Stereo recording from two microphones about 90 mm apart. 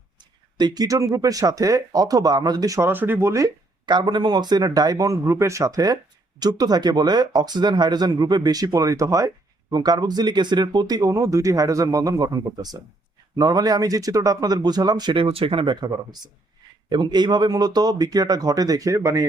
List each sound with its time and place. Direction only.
0.2 s speech: 55° right (ahead or behind)
2.8 s speech: 25° right (ahead or behind)
3.8 s speech: 55° right (ahead or behind); by 15.7 s 90° right
15.7 s speech: 50° right (ahead or behind)